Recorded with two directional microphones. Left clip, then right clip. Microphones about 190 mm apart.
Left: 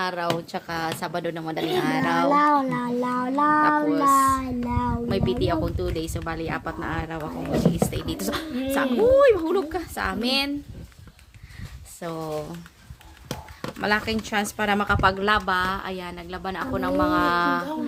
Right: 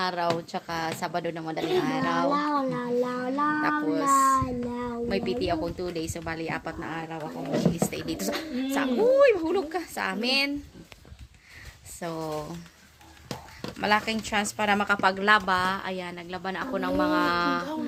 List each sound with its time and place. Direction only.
0.0 s speech: 5° right (ahead or behind)
0.5 s a woman's voice: 5° left (ahead or behind); by 2.3 s 20° left (ahead or behind)
2.3 s child singing: 35° left (ahead or behind)
3.8 s a woman's voice: 5° left (ahead or behind)
4.3 s child singing: 30° left (ahead or behind)
5.0 s a woman's voice: 10° left (ahead or behind); by 7.9 s 25° left (ahead or behind)
7.9 s a woman's voice: 5° left (ahead or behind)
11.9 s a woman's voice: centre (ahead or behind)
13.8 s a woman's voice: centre (ahead or behind)